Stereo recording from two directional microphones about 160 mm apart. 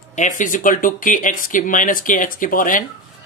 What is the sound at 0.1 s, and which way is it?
Speech, 50° left (ahead or behind).